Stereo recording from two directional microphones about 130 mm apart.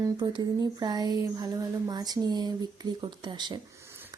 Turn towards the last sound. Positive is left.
turn(degrees=-35)  # may be behind; listen again after turning